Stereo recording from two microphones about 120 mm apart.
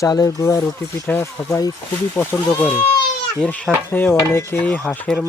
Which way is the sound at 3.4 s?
10° left (ahead or behind).